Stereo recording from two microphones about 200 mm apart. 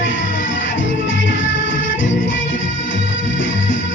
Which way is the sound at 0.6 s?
70° left (ahead or behind).